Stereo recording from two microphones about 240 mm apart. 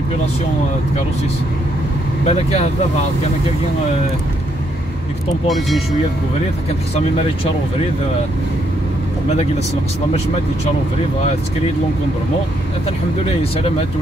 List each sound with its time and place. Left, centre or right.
2.2 s speech: left
13.4 s speech: left